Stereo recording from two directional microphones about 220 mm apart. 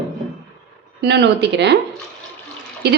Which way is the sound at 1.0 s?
50° right (ahead or behind).